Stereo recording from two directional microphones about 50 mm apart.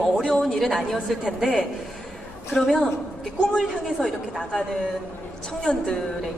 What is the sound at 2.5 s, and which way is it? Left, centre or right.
Speech, centre.